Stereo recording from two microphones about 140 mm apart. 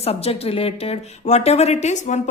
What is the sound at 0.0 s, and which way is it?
Speech, 45° left (ahead or behind).